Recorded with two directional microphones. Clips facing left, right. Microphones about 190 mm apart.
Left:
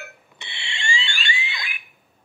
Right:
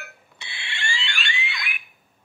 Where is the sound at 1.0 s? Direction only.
30° left (ahead or behind).